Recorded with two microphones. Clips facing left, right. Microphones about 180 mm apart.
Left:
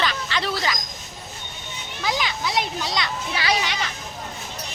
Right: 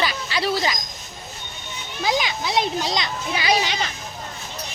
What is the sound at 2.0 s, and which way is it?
A child's voice, 20° right (ahead or behind).